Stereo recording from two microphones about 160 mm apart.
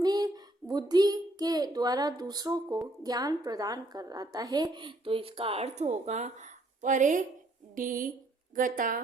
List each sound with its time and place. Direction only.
0.0 s a woman's voice: 25° right (ahead or behind); by 9.0 s 60° right (ahead or behind)